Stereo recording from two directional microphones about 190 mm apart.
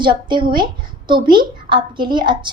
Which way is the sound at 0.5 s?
25° right (ahead or behind).